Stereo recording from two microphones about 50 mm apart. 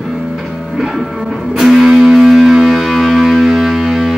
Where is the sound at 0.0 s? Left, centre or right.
Centre.